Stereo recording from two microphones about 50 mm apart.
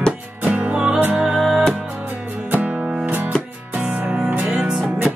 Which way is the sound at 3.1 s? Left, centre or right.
Right.